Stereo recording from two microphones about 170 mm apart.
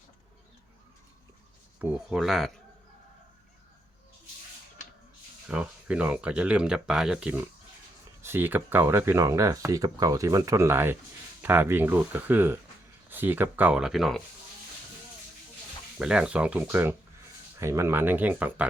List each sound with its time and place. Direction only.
2.0 s speech: centre (ahead or behind)
5.5 s speech: 5° right (ahead or behind)
16.0 s speech: 5° right (ahead or behind)